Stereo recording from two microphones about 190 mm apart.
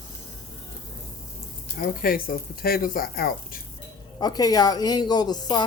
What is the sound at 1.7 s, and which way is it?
Speech, 50° left (ahead or behind).